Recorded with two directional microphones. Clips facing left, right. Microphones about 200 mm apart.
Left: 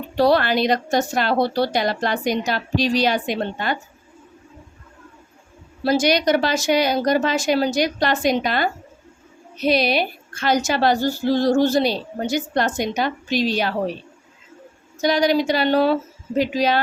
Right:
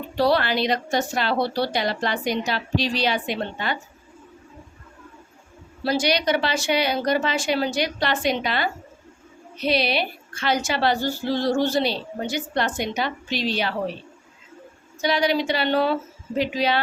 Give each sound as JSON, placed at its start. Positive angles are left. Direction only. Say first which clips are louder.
{"t": 0.2, "sound": "a woman's voice", "louder": "left 4 dB", "side_deg": 45}
{"t": 5.8, "sound": "a woman's voice", "louder": "left 4 dB", "side_deg": 45}
{"t": 15.0, "sound": "a woman's voice", "louder": "left 4 dB", "side_deg": 45}